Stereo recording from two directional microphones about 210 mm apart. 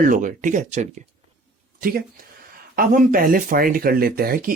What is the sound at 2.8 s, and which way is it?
Speech, 40° right (ahead or behind).